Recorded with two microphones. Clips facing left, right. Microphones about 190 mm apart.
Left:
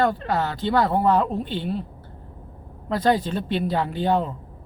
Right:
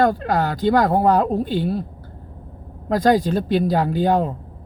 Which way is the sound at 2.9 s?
40° right (ahead or behind).